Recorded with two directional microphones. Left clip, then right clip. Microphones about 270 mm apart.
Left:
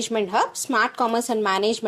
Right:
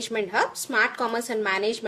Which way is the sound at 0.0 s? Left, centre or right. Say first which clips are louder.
Left 3 dB; centre.